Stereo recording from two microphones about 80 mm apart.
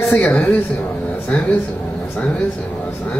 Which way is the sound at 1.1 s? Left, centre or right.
Centre.